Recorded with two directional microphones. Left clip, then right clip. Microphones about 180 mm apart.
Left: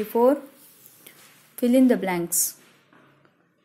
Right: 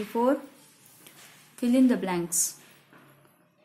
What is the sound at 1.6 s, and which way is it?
Speech, 25° left (ahead or behind).